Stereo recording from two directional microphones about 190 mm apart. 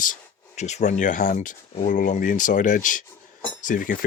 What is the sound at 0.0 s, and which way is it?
Speech, 40° left (ahead or behind).